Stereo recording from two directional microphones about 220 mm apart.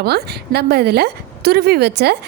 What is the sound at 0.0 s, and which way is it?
Speech, 45° right (ahead or behind).